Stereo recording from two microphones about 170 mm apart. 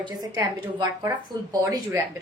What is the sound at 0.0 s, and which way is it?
A woman's voice, 25° right (ahead or behind).